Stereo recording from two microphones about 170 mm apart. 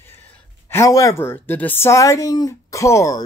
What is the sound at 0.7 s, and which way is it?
Speech, 15° left (ahead or behind).